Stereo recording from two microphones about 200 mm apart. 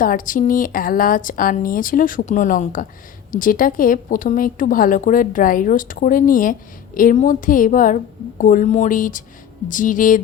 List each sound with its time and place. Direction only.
0.0 s a woman's voice: 45° left (ahead or behind)